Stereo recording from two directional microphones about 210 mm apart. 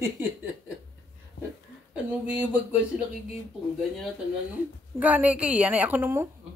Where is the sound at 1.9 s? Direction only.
5° right (ahead or behind).